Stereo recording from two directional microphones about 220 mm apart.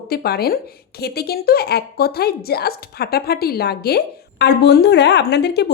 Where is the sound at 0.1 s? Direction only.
45° left (ahead or behind).